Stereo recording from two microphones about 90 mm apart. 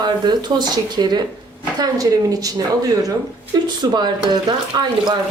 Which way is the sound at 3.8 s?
55° right (ahead or behind).